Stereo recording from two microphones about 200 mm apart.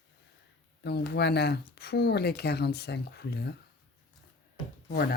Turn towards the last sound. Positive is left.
turn(degrees=50)  # may be behind; listen again after turning